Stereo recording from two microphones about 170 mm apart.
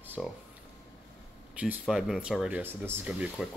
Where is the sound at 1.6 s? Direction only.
5° right (ahead or behind).